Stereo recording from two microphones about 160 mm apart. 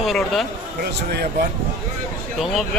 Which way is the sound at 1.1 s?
80° right.